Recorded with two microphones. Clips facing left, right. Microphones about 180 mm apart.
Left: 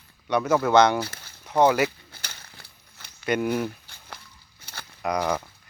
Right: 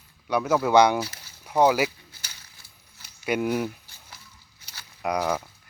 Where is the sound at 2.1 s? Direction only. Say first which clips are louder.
Left 5 dB; 60° left (ahead or behind).